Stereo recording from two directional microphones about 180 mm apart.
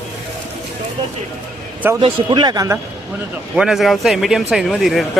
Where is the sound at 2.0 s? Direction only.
25° right (ahead or behind).